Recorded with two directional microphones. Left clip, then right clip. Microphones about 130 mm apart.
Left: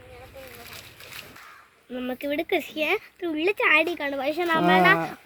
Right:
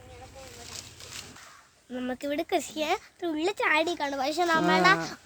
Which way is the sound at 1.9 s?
20° right (ahead or behind).